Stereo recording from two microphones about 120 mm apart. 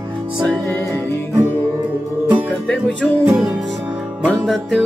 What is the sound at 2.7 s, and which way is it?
Music, 10° left (ahead or behind).